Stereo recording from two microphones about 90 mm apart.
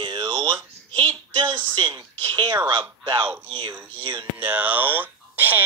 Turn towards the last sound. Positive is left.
turn(degrees=-20)  # may be behind; listen again after turning